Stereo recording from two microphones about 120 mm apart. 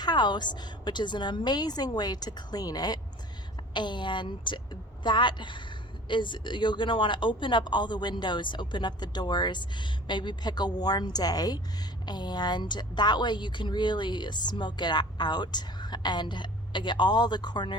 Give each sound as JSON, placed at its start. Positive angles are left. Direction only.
{"t": 0.0, "sound": "speech", "side_deg": 35}